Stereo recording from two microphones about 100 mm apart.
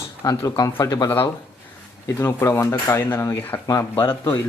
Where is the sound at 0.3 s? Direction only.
40° left (ahead or behind).